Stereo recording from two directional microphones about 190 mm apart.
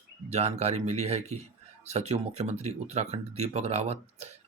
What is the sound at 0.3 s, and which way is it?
Speech, 35° right (ahead or behind).